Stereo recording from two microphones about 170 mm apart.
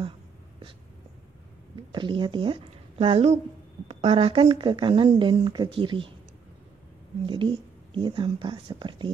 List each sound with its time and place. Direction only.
1.9 s speech: 25° right (ahead or behind)
7.2 s speech: 30° right (ahead or behind)